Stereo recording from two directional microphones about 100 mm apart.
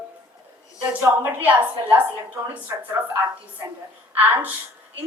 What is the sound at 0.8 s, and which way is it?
A woman's voice, 15° right (ahead or behind).